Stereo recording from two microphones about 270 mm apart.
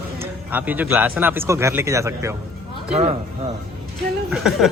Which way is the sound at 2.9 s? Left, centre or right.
Right.